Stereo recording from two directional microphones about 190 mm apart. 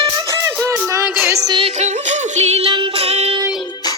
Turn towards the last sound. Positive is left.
turn(degrees=-30)  # may be behind; listen again after turning